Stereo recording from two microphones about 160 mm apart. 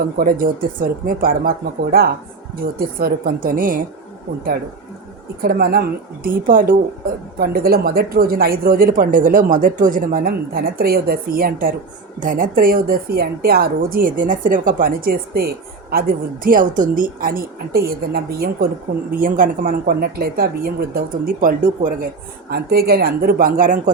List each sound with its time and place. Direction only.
0.2 s a woman's voice: 60° right (ahead or behind)
5.4 s a woman's voice: 70° right (ahead or behind)
6.2 s a woman's voice: 60° right (ahead or behind)
12.2 s a woman's voice: 60° right (ahead or behind); by 18.7 s 75° right (ahead or behind)
19.1 s a woman's voice: 60° right (ahead or behind)
22.4 s a woman's voice: 75° right (ahead or behind); by 23.9 s 55° right (ahead or behind)